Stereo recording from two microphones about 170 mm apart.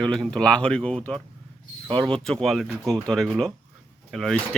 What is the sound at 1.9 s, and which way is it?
Speech, 30° right (ahead or behind).